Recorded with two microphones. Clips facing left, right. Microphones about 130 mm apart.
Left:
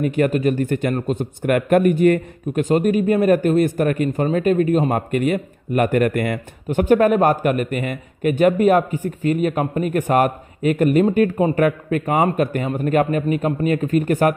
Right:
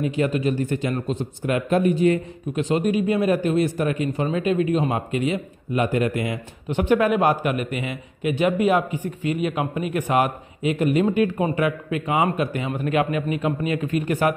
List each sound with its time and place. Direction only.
0.0 s a man's voice: 55° left (ahead or behind)